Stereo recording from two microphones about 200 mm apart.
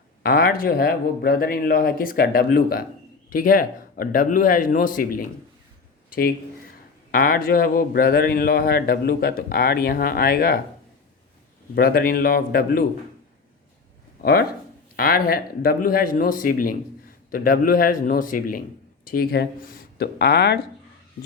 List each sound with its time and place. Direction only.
0.2 s speech: 50° left (ahead or behind)
11.7 s speech: 45° left (ahead or behind)
14.2 s speech: 50° left (ahead or behind)